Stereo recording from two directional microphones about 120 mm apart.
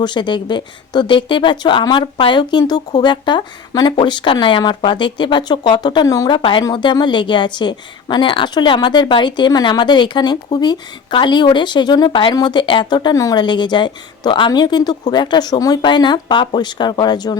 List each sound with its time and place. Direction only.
0.0 s speech: 40° left (ahead or behind)